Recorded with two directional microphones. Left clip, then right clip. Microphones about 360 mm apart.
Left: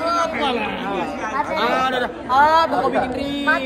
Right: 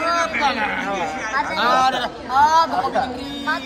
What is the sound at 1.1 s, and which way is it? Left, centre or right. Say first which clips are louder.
Speech: right 1 dB; left.